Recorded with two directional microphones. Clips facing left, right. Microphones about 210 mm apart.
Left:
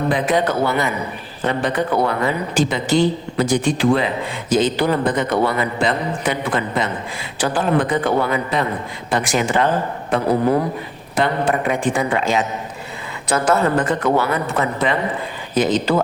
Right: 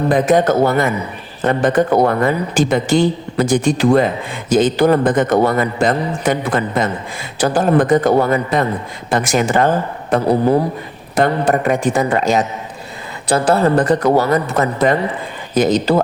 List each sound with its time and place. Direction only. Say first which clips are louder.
0.1 s a man's voice: right 7 dB; 45° right (ahead or behind)
10.1 s a man's voice: right 3 dB; 35° right (ahead or behind)